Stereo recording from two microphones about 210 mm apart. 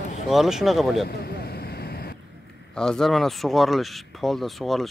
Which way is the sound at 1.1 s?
50° left (ahead or behind).